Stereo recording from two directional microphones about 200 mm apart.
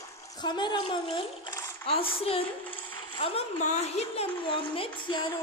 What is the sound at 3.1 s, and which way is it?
A woman's voice, 30° left (ahead or behind).